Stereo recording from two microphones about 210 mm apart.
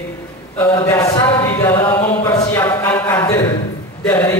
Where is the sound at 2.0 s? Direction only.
10° left (ahead or behind).